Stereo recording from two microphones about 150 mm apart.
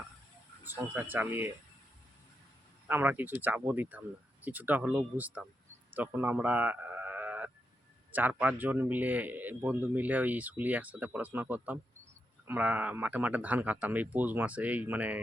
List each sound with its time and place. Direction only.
0.6 s speech: 10° right (ahead or behind)
2.8 s speech: 10° right (ahead or behind)
5.9 s a sound: 10° right (ahead or behind)
8.1 s speech: 10° right (ahead or behind)